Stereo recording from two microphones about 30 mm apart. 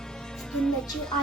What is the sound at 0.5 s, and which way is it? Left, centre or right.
Speech, left.